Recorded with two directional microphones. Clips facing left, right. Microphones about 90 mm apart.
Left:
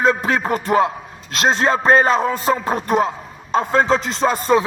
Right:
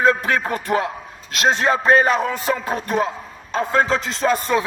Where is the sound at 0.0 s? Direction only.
20° left (ahead or behind).